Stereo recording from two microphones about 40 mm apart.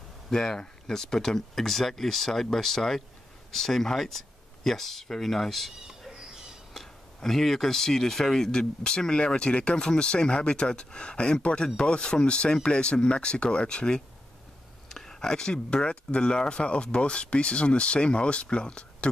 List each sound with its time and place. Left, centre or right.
0.3 s speech: centre
5.7 s a sound: centre
7.2 s speech: centre; by 13.9 s left
14.9 s speech: centre